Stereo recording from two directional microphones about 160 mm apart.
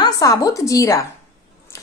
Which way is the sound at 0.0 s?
20° left (ahead or behind).